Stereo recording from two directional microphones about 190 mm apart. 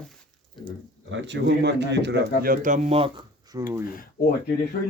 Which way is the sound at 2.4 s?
45° right (ahead or behind).